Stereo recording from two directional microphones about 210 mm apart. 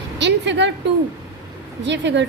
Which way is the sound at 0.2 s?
55° right (ahead or behind).